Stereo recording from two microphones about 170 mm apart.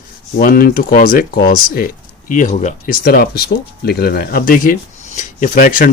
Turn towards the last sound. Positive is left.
turn(degrees=55)  # may be behind; listen again after turning